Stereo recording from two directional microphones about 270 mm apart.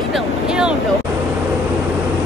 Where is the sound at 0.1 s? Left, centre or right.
Centre.